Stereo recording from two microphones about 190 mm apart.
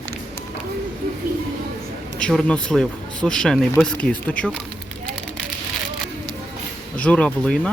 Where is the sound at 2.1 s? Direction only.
5° left (ahead or behind).